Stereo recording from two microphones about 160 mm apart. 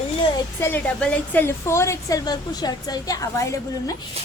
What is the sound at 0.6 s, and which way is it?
A woman's voice, 15° left (ahead or behind).